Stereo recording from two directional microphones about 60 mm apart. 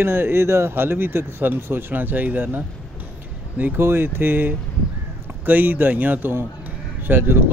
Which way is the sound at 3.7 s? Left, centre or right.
Right.